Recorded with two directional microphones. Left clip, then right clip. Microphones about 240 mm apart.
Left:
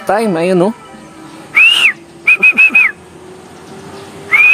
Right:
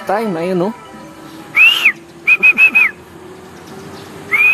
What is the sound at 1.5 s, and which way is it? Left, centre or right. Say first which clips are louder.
Whistling: left 2 dB; centre.